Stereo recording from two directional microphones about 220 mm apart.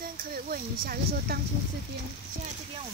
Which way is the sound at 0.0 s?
40° right (ahead or behind).